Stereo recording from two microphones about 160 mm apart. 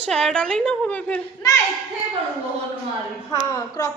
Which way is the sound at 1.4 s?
25° left (ahead or behind).